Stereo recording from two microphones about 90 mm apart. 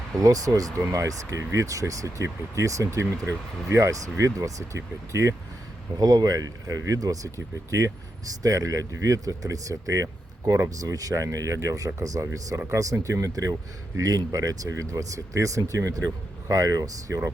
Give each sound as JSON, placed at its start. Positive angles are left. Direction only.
{"t": 0.2, "sound": "speech", "side_deg": -40}
{"t": 6.0, "sound": "speech", "side_deg": -45}